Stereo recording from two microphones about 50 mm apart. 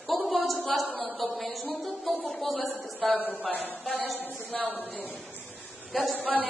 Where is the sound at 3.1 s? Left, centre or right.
Right.